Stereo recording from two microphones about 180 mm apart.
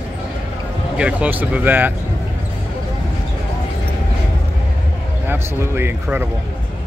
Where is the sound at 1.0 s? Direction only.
5° right (ahead or behind).